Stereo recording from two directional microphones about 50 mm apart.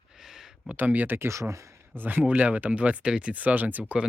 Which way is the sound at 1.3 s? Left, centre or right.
Right.